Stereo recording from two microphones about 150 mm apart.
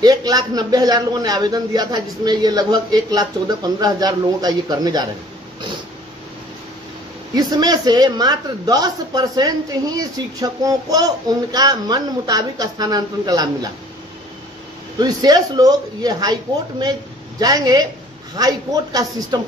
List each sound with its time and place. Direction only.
0.0 s a man's voice: 25° right (ahead or behind)
7.3 s a man's voice: 25° right (ahead or behind)
15.0 s a man's voice: 25° right (ahead or behind)
17.4 s a man's voice: 25° right (ahead or behind)